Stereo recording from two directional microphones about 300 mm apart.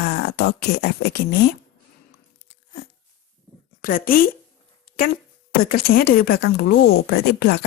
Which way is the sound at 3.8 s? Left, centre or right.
Left.